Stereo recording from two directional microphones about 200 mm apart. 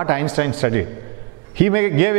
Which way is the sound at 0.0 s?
15° right (ahead or behind).